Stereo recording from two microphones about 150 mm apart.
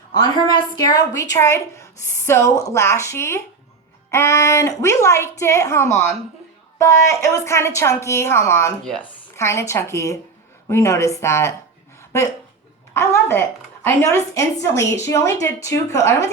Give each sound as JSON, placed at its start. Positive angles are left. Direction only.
{"t": 0.1, "sound": "a woman's voice", "side_deg": 25}
{"t": 12.9, "sound": "a woman's voice", "side_deg": 15}